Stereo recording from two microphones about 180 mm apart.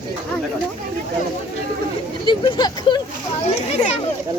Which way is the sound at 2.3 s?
25° left (ahead or behind).